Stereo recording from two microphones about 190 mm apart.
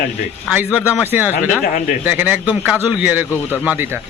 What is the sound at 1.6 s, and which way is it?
Speech, 40° left (ahead or behind).